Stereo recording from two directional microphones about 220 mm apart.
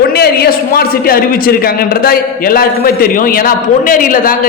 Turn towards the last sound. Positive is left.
turn(degrees=40)  # may be behind; listen again after turning